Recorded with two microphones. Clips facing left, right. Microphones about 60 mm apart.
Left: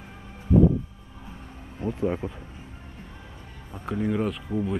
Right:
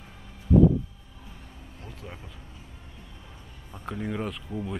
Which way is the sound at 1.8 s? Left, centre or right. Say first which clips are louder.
Left 17 dB; left.